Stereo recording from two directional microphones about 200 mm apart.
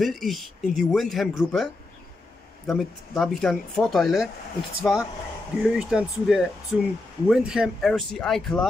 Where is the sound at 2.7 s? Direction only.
Centre (ahead or behind).